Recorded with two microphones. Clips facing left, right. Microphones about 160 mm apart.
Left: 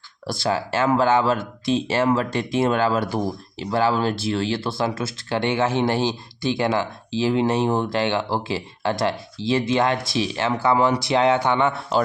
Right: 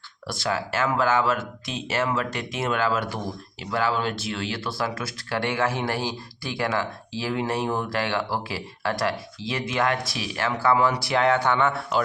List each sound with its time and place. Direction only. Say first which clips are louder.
0.3 s speech: left 4 dB; 30° left (ahead or behind)